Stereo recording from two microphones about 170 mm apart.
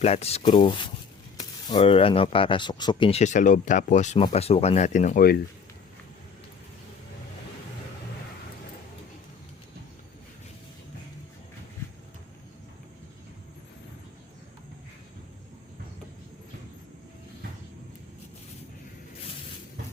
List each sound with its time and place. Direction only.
0.0 s speech: 35° left (ahead or behind)